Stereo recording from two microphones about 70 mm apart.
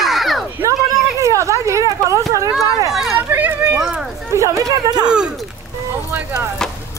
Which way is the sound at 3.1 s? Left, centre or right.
Right.